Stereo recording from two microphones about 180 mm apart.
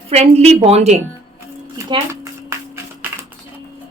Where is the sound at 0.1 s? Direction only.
35° right (ahead or behind).